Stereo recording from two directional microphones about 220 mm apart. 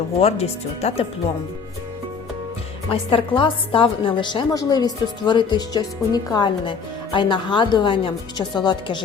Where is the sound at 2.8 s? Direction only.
25° left (ahead or behind).